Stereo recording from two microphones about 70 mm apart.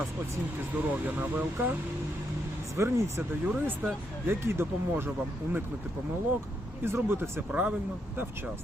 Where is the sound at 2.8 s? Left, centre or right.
Right.